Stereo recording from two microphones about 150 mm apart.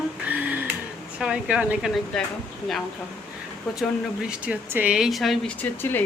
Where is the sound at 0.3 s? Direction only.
10° right (ahead or behind).